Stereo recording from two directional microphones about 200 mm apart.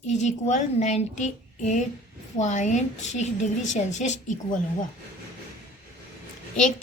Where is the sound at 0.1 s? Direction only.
35° left (ahead or behind).